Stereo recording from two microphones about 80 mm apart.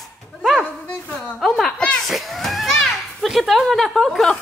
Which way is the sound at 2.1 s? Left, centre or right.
Centre.